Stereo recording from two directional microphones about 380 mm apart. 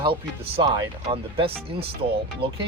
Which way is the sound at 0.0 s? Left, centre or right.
Centre.